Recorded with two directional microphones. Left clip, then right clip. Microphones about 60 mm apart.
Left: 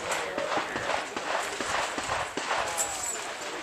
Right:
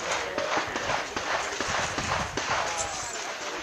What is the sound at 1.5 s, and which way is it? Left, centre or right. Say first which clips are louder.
Clip-clop: right 1 dB; right.